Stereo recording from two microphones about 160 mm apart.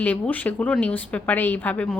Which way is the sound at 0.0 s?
10° left (ahead or behind).